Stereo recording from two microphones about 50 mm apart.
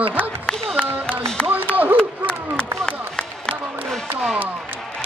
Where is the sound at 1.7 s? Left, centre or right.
Right.